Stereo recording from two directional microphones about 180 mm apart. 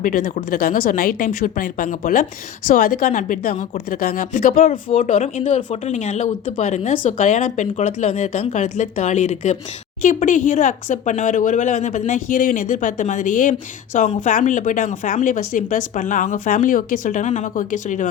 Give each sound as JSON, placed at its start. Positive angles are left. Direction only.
{"t": 0.0, "sound": "speech", "side_deg": 50}